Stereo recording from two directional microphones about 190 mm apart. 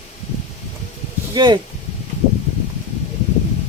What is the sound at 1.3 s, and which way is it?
Speech, 25° right (ahead or behind).